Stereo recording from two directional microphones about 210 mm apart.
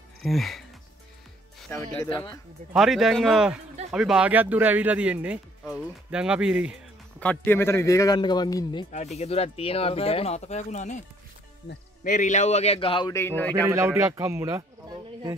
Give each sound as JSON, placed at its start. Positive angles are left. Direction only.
{"t": 0.2, "sound": "speech", "side_deg": 0}
{"t": 1.7, "sound": "a man's voice", "side_deg": 15}
{"t": 2.7, "sound": "speech", "side_deg": 0}
{"t": 7.2, "sound": "a man's voice", "side_deg": 10}
{"t": 8.9, "sound": "speech", "side_deg": 30}
{"t": 12.0, "sound": "speech", "side_deg": 35}
{"t": 13.7, "sound": "speech", "side_deg": -15}